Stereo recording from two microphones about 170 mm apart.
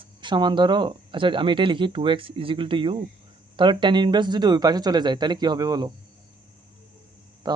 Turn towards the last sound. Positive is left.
turn(degrees=-25)  # may be behind; listen again after turning